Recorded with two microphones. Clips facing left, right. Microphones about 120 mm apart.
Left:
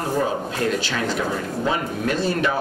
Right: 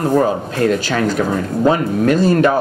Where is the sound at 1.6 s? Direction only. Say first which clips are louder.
Right 11 dB; 50° right (ahead or behind).